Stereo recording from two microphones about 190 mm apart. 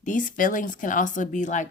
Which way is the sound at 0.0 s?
40° left (ahead or behind).